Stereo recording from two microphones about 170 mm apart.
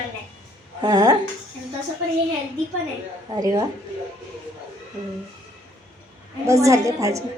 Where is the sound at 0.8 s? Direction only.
20° right (ahead or behind).